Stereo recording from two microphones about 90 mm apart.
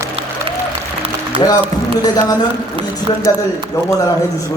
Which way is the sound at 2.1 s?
45° left (ahead or behind).